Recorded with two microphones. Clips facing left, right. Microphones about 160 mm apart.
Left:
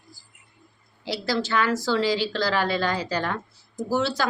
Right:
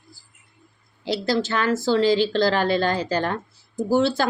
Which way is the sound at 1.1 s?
50° right (ahead or behind).